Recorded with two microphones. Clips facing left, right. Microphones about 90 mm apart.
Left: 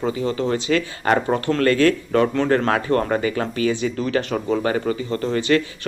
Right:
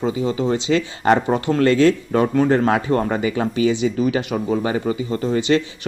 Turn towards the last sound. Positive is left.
turn(degrees=-20)  # may be behind; listen again after turning